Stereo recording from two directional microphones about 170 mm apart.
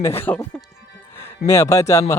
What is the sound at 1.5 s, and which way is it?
Speech, 20° left (ahead or behind).